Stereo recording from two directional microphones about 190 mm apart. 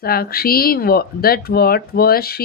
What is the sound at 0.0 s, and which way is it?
A woman's voice, 55° left (ahead or behind).